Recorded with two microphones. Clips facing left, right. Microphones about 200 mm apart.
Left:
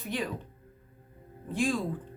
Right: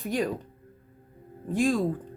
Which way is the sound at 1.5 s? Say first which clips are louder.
Right 4 dB; 45° right (ahead or behind).